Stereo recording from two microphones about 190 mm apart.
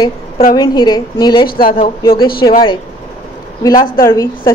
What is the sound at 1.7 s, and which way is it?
Speech, 25° left (ahead or behind).